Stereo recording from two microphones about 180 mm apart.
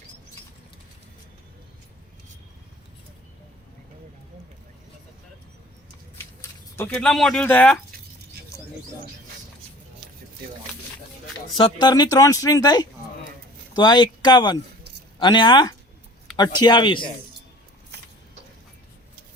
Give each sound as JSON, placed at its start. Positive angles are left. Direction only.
{"t": 6.7, "sound": "speech", "side_deg": 10}
{"t": 11.5, "sound": "speech", "side_deg": 25}